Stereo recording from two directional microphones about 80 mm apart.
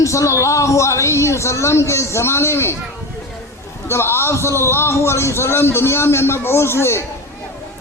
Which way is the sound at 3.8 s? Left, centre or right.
Left.